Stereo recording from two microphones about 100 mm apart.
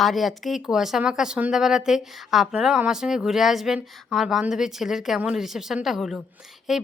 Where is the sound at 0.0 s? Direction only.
Centre (ahead or behind).